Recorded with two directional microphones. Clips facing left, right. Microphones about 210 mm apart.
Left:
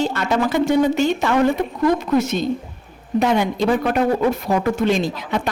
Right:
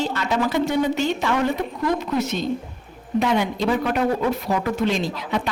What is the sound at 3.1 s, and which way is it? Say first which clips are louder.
A woman's voice: left 3 dB; 45° left (ahead or behind).